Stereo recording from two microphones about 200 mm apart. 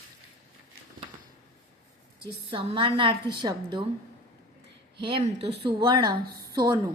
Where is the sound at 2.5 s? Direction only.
25° right (ahead or behind).